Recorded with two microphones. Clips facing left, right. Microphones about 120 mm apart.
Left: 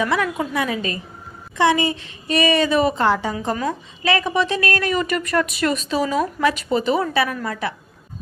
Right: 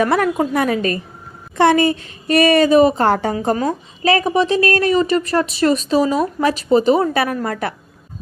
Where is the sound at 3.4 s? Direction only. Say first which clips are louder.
Right 5 dB; 35° right (ahead or behind).